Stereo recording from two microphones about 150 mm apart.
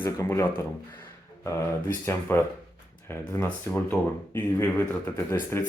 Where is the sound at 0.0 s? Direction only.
15° left (ahead or behind).